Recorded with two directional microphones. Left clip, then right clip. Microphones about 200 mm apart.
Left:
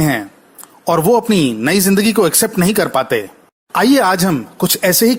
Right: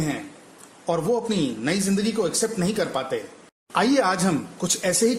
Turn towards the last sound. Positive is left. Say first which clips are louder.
# left 9 dB
turn(degrees=30)  # may be behind; listen again after turning